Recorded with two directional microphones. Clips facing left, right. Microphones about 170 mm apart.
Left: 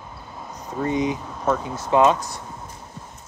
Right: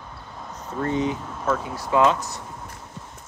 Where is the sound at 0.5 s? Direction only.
15° left (ahead or behind).